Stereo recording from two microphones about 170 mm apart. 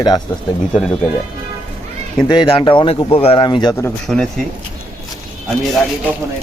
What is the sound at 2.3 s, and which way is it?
Speech, 30° left (ahead or behind).